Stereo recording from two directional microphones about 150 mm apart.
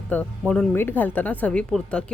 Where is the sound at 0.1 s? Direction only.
10° left (ahead or behind).